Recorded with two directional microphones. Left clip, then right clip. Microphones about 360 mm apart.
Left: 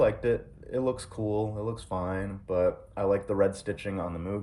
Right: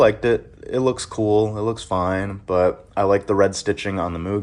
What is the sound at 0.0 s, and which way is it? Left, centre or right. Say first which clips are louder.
Speech: right 9 dB; centre.